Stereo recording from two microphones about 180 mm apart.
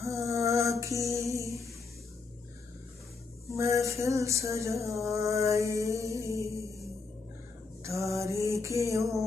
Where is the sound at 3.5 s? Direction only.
15° right (ahead or behind).